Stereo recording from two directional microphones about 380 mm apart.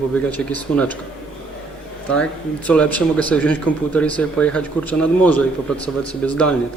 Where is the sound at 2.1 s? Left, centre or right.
Centre.